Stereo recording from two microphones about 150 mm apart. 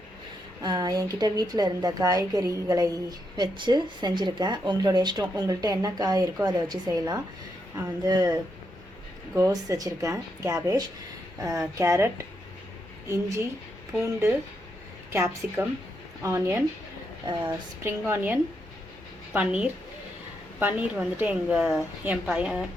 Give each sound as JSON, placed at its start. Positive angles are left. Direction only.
{"t": 0.6, "sound": "speech", "side_deg": -25}
{"t": 14.0, "sound": "a woman's voice", "side_deg": -20}